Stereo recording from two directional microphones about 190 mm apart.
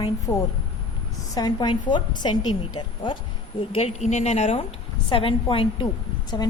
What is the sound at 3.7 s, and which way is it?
A woman's voice, 35° left (ahead or behind).